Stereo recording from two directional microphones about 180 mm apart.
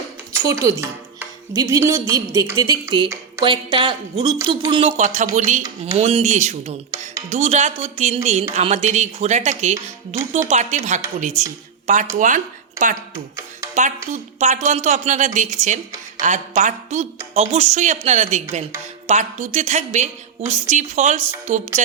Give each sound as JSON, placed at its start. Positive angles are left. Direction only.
{"t": 0.3, "sound": "speech", "side_deg": -15}
{"t": 2.5, "sound": "a sound", "side_deg": -15}
{"t": 3.4, "sound": "speech", "side_deg": -25}
{"t": 13.7, "sound": "speech", "side_deg": -40}